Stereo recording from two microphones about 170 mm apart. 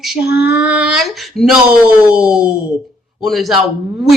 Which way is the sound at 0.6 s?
5° right (ahead or behind).